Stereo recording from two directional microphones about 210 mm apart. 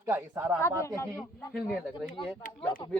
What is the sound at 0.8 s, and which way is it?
Speech, 15° left (ahead or behind).